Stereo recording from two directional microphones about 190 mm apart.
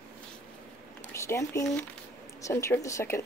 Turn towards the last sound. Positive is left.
turn(degrees=15)  # may be behind; listen again after turning